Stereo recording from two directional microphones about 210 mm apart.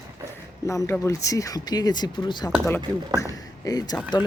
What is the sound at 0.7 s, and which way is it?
Speech, 15° left (ahead or behind).